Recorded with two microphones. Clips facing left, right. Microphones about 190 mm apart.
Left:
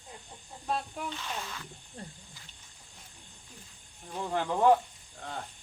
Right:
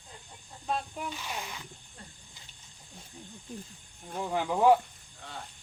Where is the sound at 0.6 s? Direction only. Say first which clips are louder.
Even; centre (ahead or behind).